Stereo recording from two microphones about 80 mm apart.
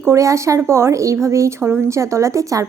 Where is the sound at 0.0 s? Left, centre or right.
Right.